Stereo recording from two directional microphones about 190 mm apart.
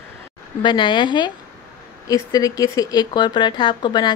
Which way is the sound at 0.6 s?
25° left (ahead or behind).